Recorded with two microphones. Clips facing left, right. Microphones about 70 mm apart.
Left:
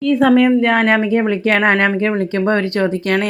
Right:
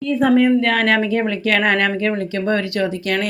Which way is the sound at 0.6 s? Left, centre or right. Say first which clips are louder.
Left 3 dB; left.